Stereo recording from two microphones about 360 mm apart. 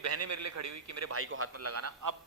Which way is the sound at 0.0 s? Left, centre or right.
Right.